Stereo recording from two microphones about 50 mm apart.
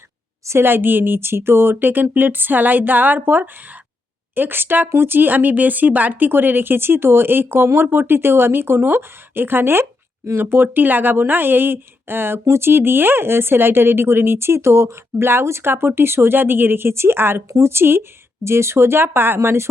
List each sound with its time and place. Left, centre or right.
0.6 s speech: right
18.4 s speech: right
19.4 s speech: right